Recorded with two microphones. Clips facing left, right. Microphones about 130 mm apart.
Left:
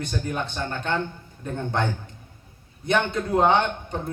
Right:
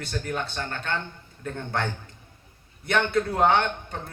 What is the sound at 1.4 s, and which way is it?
Speech, 20° left (ahead or behind).